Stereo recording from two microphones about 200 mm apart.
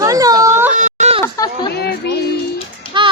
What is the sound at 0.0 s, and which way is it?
Baby cry, 20° right (ahead or behind).